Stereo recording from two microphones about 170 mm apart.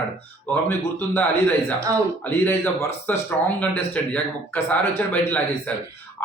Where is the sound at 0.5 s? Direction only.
10° left (ahead or behind).